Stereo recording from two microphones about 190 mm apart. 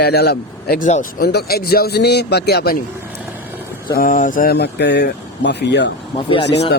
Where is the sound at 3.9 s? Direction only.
45° left (ahead or behind); by 5.9 s 65° left (ahead or behind).